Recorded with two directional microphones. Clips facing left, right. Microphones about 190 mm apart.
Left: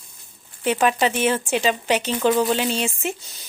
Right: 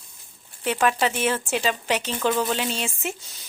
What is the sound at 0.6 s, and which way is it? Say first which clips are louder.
Speech: left 3 dB; 5° left (ahead or behind).